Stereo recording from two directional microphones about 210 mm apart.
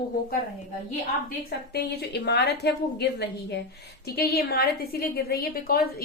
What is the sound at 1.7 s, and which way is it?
A woman's voice, 50° left (ahead or behind).